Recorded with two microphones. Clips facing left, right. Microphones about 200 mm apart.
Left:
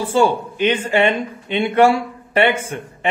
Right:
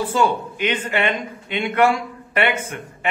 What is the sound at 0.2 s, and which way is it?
Speech, 30° left (ahead or behind).